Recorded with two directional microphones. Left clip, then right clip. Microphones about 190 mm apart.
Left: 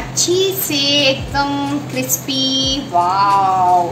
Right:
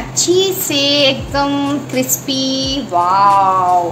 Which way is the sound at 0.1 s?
45° right (ahead or behind).